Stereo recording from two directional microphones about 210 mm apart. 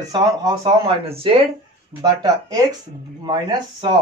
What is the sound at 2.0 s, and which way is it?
Speech, 15° right (ahead or behind).